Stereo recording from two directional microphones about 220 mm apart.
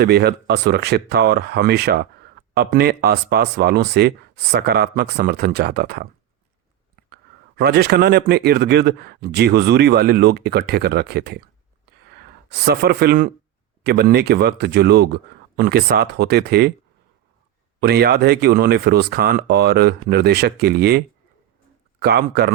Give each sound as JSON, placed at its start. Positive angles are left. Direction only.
{"t": 0.0, "sound": "speech", "side_deg": -45}
{"t": 12.5, "sound": "speech", "side_deg": -50}
{"t": 17.7, "sound": "speech", "side_deg": -45}
{"t": 22.0, "sound": "speech", "side_deg": -45}